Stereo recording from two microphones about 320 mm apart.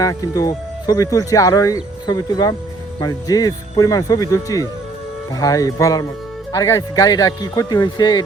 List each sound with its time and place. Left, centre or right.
0.0 s speech: centre